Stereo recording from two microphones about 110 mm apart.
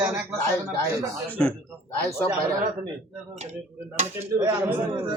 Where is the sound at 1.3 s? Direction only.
10° left (ahead or behind).